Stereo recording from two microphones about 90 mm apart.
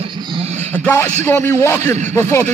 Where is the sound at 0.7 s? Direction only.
25° left (ahead or behind).